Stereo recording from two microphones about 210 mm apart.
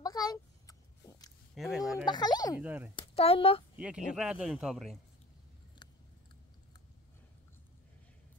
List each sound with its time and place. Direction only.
0.0 s a sound: 20° left (ahead or behind)
1.5 s speech: centre (ahead or behind)
2.0 s speech: 20° left (ahead or behind)
2.6 s speech: 10° right (ahead or behind)
3.0 s speech: 25° left (ahead or behind)
3.7 s speech: 5° right (ahead or behind)
5.8 s chewing: 20° left (ahead or behind)